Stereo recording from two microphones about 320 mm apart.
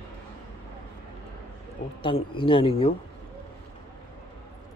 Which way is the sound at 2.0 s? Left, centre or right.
Centre.